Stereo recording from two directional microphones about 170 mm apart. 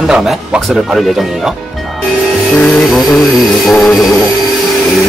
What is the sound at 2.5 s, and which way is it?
Speech, 5° left (ahead or behind).